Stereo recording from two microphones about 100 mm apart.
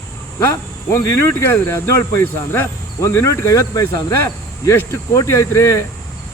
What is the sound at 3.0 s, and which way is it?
Speech, 25° left (ahead or behind).